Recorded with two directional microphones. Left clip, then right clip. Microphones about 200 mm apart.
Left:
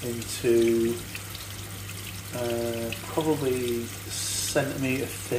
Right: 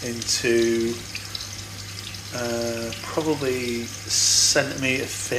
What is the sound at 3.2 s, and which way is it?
Speech, 25° right (ahead or behind).